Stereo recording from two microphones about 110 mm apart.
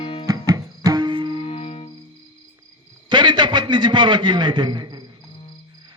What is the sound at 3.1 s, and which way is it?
A man's voice, 45° right (ahead or behind).